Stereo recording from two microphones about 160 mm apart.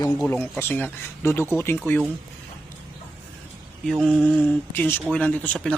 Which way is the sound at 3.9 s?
Centre (ahead or behind).